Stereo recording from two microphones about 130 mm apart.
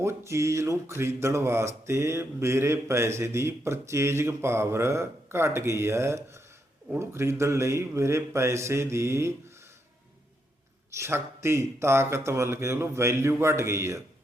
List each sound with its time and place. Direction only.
0.0 s speech: 20° right (ahead or behind)
10.9 s speech: 20° right (ahead or behind)